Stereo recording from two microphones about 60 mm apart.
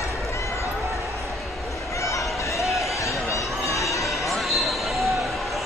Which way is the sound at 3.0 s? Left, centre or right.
Left.